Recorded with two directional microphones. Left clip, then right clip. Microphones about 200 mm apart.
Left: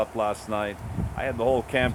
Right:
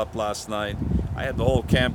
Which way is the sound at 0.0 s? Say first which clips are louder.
Left 1 dB; 15° right (ahead or behind).